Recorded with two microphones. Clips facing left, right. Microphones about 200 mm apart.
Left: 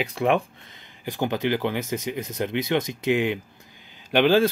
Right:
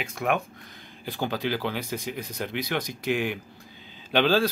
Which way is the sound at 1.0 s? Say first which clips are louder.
Left 4 dB; 15° left (ahead or behind).